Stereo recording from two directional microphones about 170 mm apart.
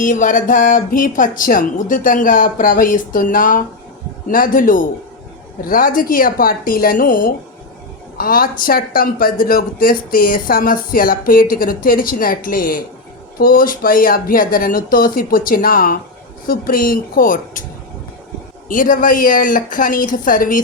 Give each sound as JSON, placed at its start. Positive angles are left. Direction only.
{"t": 0.0, "sound": "speech", "side_deg": 50}
{"t": 18.7, "sound": "speech", "side_deg": 50}